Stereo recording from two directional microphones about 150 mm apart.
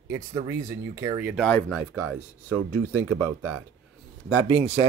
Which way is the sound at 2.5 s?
20° right (ahead or behind).